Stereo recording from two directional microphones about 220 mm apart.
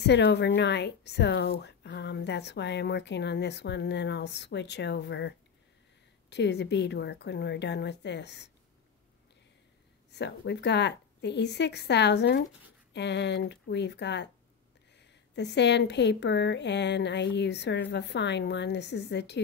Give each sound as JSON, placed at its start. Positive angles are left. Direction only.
{"t": 0.0, "sound": "speech", "side_deg": 50}
{"t": 6.3, "sound": "speech", "side_deg": 50}
{"t": 10.1, "sound": "speech", "side_deg": 50}